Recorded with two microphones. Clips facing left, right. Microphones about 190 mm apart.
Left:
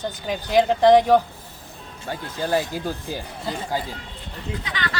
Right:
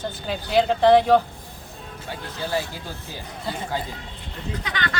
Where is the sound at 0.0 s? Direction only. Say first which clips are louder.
Left 1 dB; 15° left (ahead or behind).